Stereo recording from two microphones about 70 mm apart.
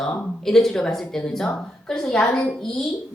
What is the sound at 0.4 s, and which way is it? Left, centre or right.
Speech, centre.